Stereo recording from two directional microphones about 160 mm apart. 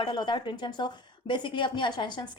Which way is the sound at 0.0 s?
30° left (ahead or behind).